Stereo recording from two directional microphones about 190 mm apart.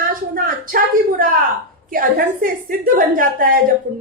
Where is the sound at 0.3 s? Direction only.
50° right (ahead or behind).